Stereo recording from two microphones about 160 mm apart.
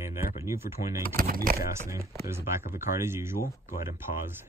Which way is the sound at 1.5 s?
20° right (ahead or behind).